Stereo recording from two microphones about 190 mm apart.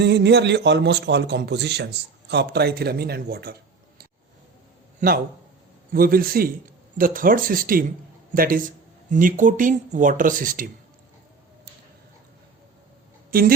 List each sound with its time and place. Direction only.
0.0 s a man's voice: 65° right (ahead or behind); by 10.7 s 45° right (ahead or behind)
13.3 s speech: 50° right (ahead or behind)